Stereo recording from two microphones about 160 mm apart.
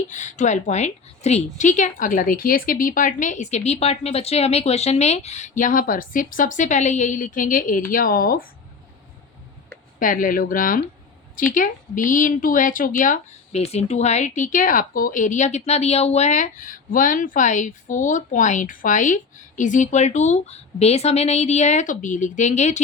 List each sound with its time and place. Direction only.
0.1 s speech: 50° left (ahead or behind); by 8.4 s 65° left (ahead or behind)
10.0 s speech: 60° left (ahead or behind)